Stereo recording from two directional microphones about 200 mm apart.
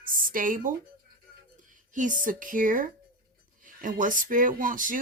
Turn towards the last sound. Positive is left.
turn(degrees=-40)  # may be behind; listen again after turning